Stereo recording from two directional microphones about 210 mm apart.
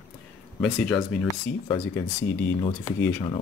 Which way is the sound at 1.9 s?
10° left (ahead or behind).